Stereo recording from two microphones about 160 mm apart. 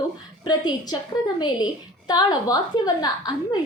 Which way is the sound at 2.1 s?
25° left (ahead or behind).